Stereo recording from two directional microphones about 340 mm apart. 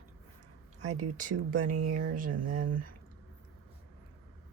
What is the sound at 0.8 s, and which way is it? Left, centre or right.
Speech, right.